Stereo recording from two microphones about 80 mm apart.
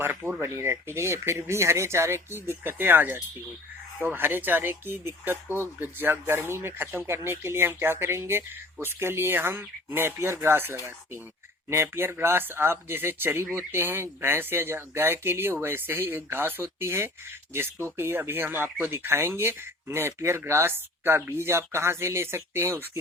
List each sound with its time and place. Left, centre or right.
0.0 s speech: right